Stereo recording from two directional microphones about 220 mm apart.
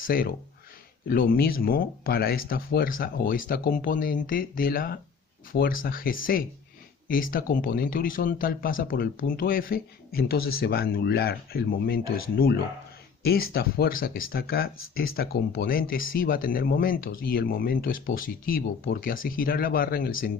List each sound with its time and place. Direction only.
0.0 s speech: 40° left (ahead or behind)